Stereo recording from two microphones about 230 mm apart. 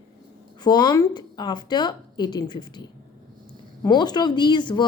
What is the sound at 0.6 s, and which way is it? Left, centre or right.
Speech, centre.